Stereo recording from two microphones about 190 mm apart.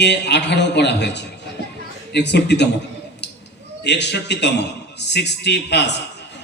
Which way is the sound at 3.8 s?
65° left (ahead or behind).